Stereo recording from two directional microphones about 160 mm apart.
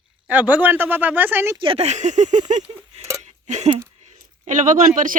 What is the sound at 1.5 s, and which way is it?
Speech, 35° right (ahead or behind).